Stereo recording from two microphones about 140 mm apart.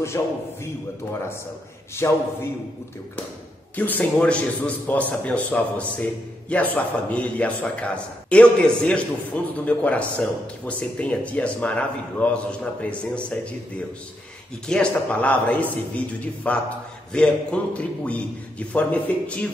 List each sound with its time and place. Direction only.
0.2 s a man's voice: 20° left (ahead or behind)
2.0 s a man's voice: 20° left (ahead or behind)
3.7 s a man's voice: 10° left (ahead or behind)